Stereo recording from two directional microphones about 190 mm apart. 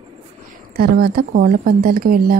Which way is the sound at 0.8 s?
50° right (ahead or behind).